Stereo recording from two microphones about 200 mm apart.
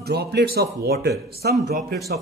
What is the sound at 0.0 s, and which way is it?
A man's voice, 55° right (ahead or behind).